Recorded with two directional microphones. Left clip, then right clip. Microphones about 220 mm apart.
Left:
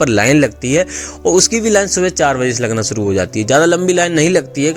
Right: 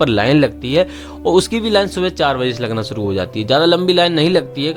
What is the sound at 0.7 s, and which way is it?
Speech, 5° left (ahead or behind).